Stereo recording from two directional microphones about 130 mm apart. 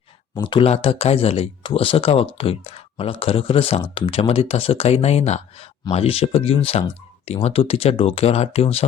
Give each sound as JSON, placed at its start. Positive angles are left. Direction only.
{"t": 0.4, "sound": "speech", "side_deg": 45}